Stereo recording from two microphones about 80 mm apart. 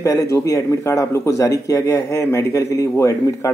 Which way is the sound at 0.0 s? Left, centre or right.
Left.